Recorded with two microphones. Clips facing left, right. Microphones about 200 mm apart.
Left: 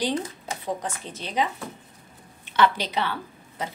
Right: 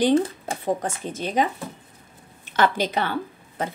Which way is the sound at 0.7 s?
50° right (ahead or behind).